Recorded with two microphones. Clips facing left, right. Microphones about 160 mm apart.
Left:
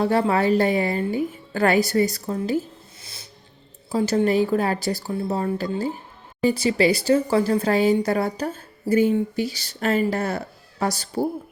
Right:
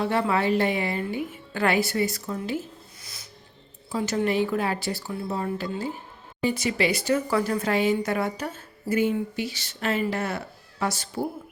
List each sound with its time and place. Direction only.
0.0 s speech: 40° left (ahead or behind)
3.0 s music: 30° left (ahead or behind)
3.9 s speech: 35° left (ahead or behind)